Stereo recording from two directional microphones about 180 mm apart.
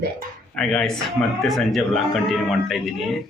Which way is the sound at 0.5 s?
5° left (ahead or behind).